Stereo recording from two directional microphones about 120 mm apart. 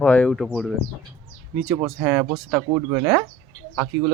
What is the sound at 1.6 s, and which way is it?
Speech, 30° right (ahead or behind).